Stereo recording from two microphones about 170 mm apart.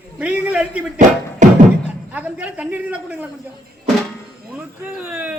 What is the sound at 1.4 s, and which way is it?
Beatboxing, 45° right (ahead or behind).